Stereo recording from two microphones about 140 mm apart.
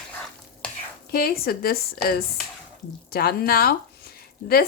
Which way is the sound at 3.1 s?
90° left.